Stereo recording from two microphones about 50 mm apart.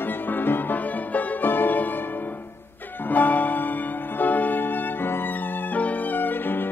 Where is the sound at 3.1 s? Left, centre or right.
Left.